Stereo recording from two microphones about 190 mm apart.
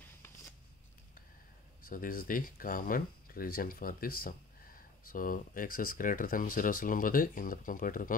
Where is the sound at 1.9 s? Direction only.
45° left (ahead or behind).